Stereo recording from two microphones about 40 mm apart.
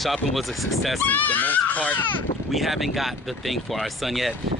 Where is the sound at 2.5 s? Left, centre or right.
Centre.